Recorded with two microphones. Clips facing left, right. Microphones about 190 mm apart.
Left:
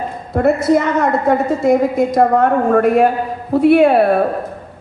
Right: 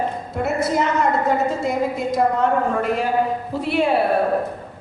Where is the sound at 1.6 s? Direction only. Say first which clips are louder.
Left 8 dB; 55° left (ahead or behind).